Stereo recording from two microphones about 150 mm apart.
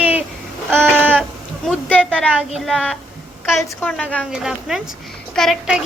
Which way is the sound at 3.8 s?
10° left (ahead or behind).